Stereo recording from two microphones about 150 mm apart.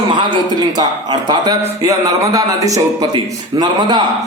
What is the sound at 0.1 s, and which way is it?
A man's voice, 30° right (ahead or behind).